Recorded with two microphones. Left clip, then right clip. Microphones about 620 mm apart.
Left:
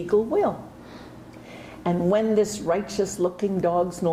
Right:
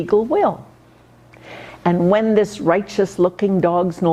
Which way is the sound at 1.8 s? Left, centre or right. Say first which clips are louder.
Right 6 dB; right.